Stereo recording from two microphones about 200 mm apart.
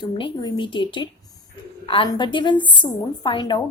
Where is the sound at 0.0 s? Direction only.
25° left (ahead or behind).